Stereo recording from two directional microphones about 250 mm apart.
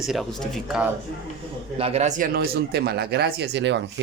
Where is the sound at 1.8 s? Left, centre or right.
Right.